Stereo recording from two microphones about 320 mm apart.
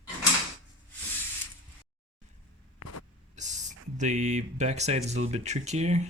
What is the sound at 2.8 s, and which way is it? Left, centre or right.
Vehicle, left.